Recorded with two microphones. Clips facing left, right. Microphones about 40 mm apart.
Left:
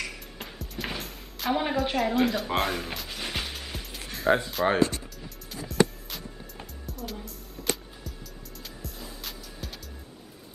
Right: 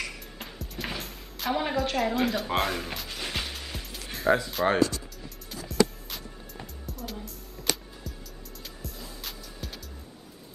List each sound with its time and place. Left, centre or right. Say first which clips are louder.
0.0 s music: even; centre
4.5 s speech: even; centre
4.7 s speech: even; left
5.7 s music: left 1 dB; centre
8.6 s music: left 1 dB; centre